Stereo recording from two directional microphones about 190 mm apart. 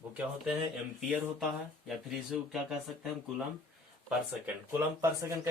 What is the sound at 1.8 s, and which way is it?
Speech, 5° right (ahead or behind).